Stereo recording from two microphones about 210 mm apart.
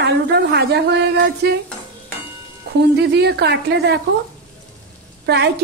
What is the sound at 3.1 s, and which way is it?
Speech, 50° right (ahead or behind).